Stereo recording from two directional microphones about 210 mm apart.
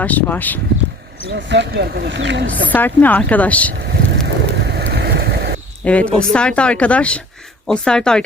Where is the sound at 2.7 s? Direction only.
10° left (ahead or behind).